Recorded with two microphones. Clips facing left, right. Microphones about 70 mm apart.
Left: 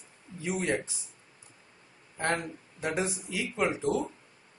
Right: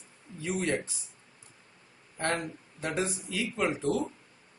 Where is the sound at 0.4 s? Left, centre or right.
Centre.